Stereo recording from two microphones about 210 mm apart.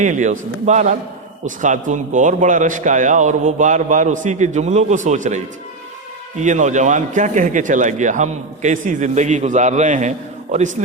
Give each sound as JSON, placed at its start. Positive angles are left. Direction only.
{"t": 0.0, "sound": "a man's voice", "side_deg": -35}
{"t": 6.4, "sound": "a man's voice", "side_deg": -35}